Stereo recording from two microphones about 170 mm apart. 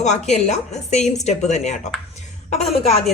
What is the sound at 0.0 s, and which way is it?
A woman's voice, 45° left (ahead or behind).